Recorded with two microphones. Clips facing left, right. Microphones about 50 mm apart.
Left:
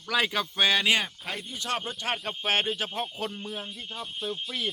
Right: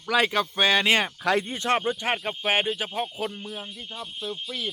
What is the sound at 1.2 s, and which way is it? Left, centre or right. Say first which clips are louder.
Speech: right 12 dB; right.